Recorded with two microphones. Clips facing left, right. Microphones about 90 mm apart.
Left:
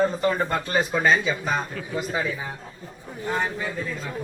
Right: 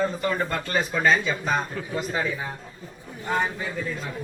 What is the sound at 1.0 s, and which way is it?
Speech, 5° left (ahead or behind).